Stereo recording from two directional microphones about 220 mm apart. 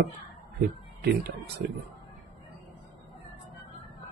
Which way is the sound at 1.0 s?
50° right (ahead or behind).